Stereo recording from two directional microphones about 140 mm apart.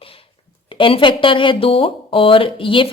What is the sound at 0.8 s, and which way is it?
A woman's voice, 40° left (ahead or behind).